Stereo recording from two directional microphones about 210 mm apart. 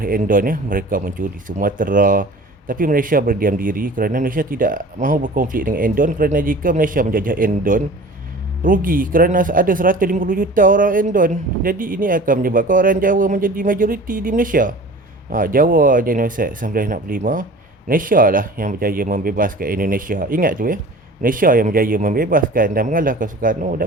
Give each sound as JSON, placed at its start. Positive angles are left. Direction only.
{"t": 0.0, "sound": "speech", "side_deg": -40}